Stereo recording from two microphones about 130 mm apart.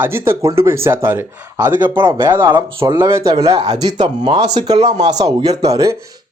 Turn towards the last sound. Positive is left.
turn(degrees=-25)  # may be behind; listen again after turning